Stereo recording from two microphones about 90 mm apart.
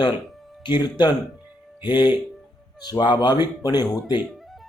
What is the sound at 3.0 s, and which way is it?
Speech, 55° left (ahead or behind).